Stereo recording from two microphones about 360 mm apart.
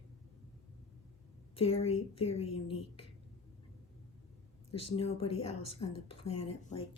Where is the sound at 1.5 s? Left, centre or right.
Centre.